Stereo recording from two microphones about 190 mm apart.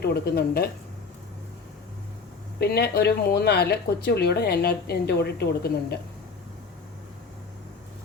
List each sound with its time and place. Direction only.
0.0 s speech: 55° left (ahead or behind)
2.6 s speech: 60° left (ahead or behind)